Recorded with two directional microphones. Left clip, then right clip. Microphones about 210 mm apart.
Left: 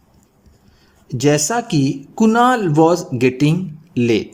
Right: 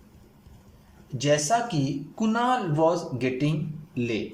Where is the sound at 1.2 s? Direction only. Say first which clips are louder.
Left 6 dB; 60° left (ahead or behind).